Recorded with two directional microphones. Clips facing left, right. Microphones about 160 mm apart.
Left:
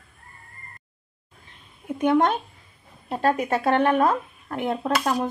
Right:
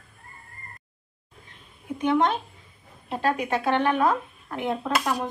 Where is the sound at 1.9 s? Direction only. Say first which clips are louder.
Left 2 dB; 50° left (ahead or behind).